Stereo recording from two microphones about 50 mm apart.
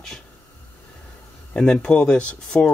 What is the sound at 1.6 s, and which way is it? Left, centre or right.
Speech, centre.